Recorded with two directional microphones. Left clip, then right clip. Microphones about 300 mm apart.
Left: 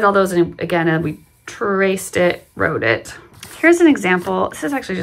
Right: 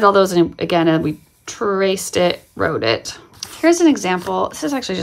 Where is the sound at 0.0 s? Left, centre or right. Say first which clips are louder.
Right 2 dB; centre.